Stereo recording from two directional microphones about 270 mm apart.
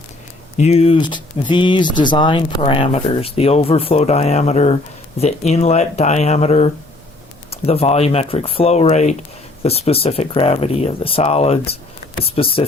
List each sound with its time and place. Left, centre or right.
0.5 s speech: left